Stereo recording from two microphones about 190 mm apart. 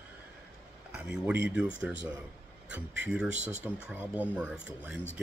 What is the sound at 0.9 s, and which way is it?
Speech, 10° right (ahead or behind).